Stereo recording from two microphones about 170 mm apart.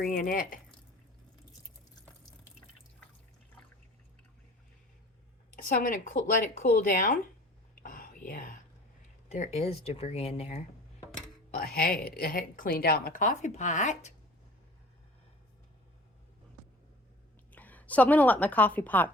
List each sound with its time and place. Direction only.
0.0 s a woman's voice: 55° left (ahead or behind)
5.6 s speech: 55° left (ahead or behind)
7.8 s whispering: 55° left (ahead or behind)
11.5 s a woman's voice: 60° left (ahead or behind); by 14.1 s 45° left (ahead or behind)
17.5 s a woman's voice: 10° left (ahead or behind)